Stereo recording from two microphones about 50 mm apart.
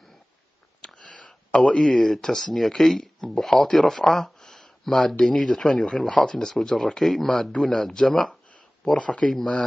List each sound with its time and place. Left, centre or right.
0.7 s a sound: centre
1.8 s speech: centre
8.9 s speech: left